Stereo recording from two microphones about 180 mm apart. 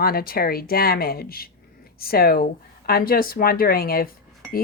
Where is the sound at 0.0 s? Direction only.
55° left (ahead or behind).